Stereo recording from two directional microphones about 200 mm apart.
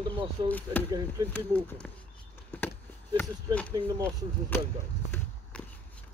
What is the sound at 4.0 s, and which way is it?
Speech, 10° left (ahead or behind).